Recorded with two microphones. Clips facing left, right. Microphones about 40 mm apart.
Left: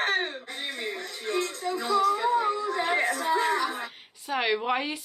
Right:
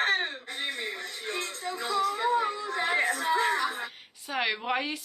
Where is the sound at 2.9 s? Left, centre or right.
Left.